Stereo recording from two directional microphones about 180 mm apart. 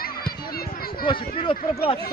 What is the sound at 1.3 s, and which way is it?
Speech, 30° left (ahead or behind).